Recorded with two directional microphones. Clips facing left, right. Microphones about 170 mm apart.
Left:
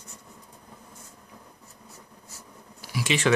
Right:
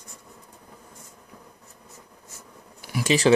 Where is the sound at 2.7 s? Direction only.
50° right (ahead or behind).